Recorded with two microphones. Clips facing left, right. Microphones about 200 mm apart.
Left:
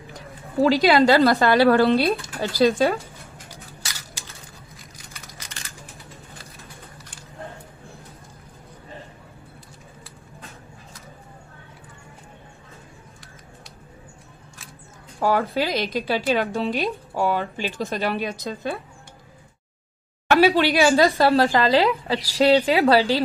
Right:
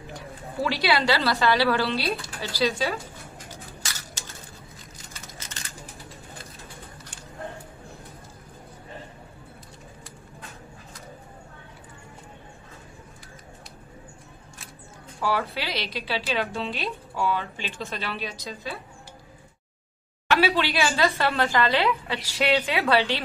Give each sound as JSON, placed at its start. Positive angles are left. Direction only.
{"t": 0.6, "sound": "a woman's voice", "side_deg": 45}
{"t": 15.1, "sound": "a woman's voice", "side_deg": 50}
{"t": 20.2, "sound": "a woman's voice", "side_deg": 45}
{"t": 21.2, "sound": "a woman's voice", "side_deg": 35}